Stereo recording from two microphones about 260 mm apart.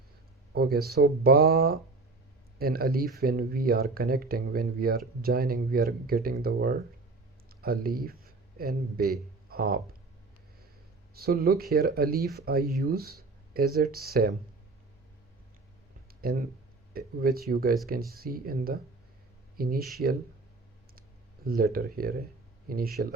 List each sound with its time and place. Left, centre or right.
0.5 s speech: right
11.1 s speech: right
16.2 s speech: right
21.4 s speech: right